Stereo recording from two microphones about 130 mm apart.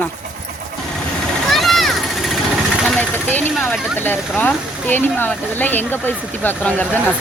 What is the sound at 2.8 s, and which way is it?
Vehicle, 10° left (ahead or behind).